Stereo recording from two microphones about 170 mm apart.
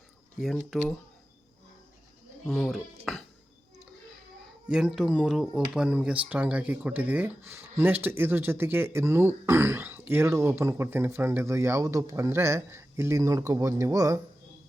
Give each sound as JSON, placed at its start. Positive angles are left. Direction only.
{"t": 0.3, "sound": "speech", "side_deg": 0}
{"t": 2.5, "sound": "speech", "side_deg": 5}
{"t": 4.7, "sound": "speech", "side_deg": -5}